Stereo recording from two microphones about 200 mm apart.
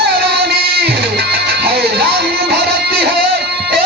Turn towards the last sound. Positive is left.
turn(degrees=-55)  # may be behind; listen again after turning